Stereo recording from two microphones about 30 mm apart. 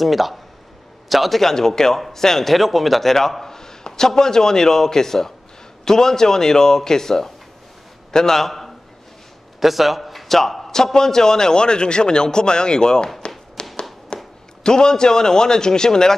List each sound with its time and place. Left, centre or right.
0.0 s a man's voice: centre
1.4 s a man's voice: centre
2.0 s a man's voice: centre
2.5 s a man's voice: centre
3.4 s a sound: centre
3.8 s a man's voice: centre
8.4 s a man's voice: centre
9.6 s a man's voice: centre
10.7 s a man's voice: centre
13.6 s tap: left
14.1 s a man's voice: left